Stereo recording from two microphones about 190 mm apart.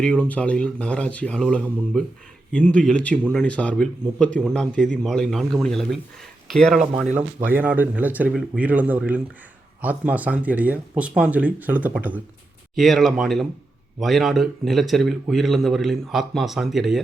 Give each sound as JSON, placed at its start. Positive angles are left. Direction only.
{"t": 0.0, "sound": "speech", "side_deg": 5}